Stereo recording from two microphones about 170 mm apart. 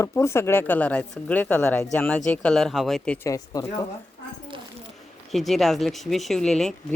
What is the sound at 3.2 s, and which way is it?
Speech, 20° left (ahead or behind).